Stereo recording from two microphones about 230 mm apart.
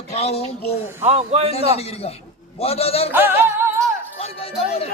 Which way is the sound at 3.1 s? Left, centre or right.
Centre.